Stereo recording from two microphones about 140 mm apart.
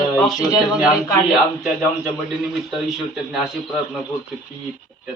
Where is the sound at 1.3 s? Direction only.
5° right (ahead or behind).